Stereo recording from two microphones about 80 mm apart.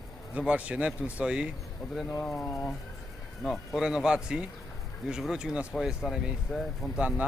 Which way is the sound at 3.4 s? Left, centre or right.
Centre.